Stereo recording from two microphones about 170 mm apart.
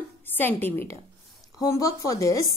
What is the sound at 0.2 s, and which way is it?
A woman's voice, 10° left (ahead or behind).